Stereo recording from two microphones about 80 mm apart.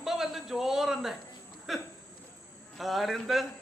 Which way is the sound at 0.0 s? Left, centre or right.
Centre.